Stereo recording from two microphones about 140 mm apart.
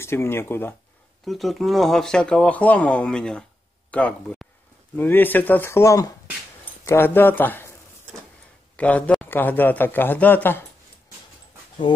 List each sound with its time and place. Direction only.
0.0 s speech: 20° left (ahead or behind)
1.2 s speech: centre (ahead or behind)
8.7 s speech: 10° left (ahead or behind)